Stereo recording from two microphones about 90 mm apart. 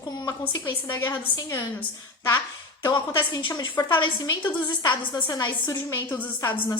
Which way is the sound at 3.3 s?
55° left (ahead or behind).